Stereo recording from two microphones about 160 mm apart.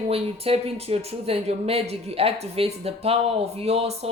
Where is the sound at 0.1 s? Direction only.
40° right (ahead or behind).